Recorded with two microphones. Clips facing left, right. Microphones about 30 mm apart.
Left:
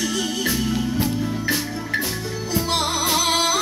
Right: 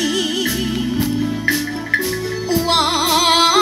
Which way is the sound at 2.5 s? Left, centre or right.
Right.